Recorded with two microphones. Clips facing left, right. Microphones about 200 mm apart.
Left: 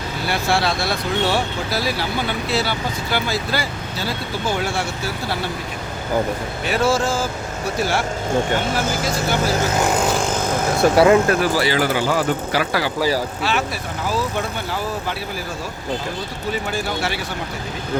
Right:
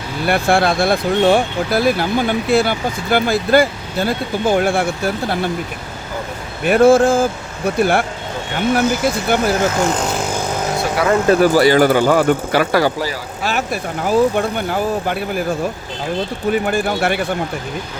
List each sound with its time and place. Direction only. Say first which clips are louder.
0.3 s speech: right 6 dB; 55° right (ahead or behind)
6.7 s speech: right 9 dB; 55° right (ahead or behind)
11.0 s speech: left 4 dB; 35° left (ahead or behind)
11.5 s speech: right 7 dB; 50° right (ahead or behind)
13.4 s speech: right 2 dB; 45° right (ahead or behind)
16.5 s speech: right 7 dB; 55° right (ahead or behind)